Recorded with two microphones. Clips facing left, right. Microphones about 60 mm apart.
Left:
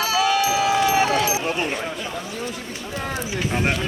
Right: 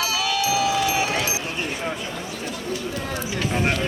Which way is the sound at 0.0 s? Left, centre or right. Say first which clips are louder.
Left 4 dB; left.